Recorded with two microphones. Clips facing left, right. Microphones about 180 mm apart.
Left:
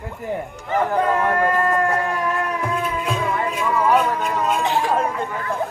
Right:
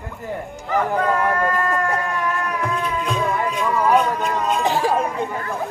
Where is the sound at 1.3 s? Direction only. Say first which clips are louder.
Left 2 dB; 25° left (ahead or behind).